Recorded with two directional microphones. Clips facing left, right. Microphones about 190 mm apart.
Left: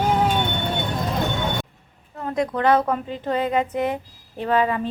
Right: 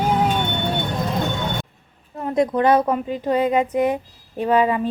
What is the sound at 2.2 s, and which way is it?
Speech, 20° right (ahead or behind).